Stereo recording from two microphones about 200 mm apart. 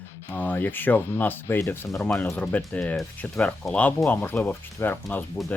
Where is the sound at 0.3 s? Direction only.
10° left (ahead or behind).